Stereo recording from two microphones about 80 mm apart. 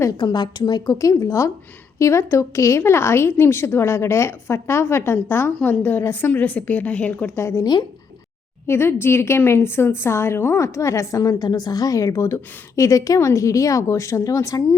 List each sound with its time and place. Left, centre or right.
0.1 s a woman's voice: left; by 7.3 s centre
7.3 s speech: left
7.6 s a woman's voice: left
8.6 s speech: left